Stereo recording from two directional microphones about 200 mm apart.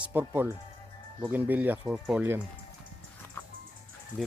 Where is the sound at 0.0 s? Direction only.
10° right (ahead or behind).